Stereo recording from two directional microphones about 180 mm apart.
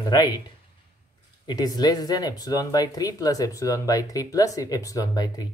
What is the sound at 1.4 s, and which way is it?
Speech, 20° left (ahead or behind).